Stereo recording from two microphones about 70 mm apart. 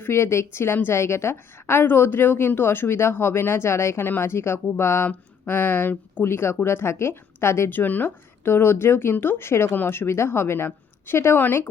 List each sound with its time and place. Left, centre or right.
0.0 s a woman's voice: left
5.0 s a woman's voice: left
7.8 s a woman's voice: left